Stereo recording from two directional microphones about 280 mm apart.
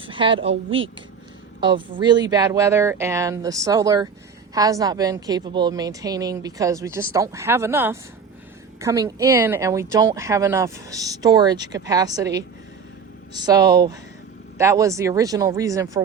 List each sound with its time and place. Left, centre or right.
0.0 s a woman's voice: centre